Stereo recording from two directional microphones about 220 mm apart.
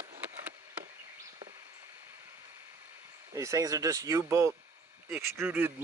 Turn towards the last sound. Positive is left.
turn(degrees=-10)  # may be behind; listen again after turning